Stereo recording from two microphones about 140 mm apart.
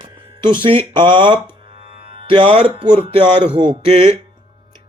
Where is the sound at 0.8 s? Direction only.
35° right (ahead or behind).